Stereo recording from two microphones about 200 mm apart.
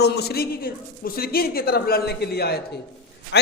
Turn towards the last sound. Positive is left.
turn(degrees=60)  # may be behind; listen again after turning